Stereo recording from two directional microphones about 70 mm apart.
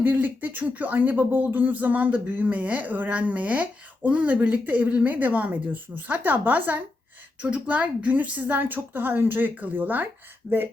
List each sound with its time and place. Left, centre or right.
0.0 s speech: right